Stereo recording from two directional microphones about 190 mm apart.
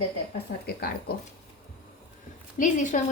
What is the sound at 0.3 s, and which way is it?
Speech, 55° left (ahead or behind).